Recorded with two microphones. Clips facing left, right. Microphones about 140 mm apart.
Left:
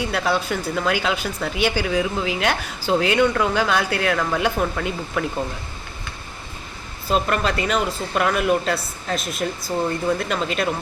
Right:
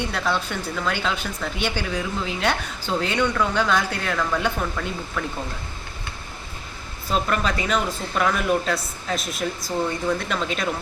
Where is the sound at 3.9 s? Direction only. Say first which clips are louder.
Left 6 dB; 90° left.